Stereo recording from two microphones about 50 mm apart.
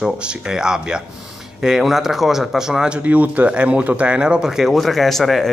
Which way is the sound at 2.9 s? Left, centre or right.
Right.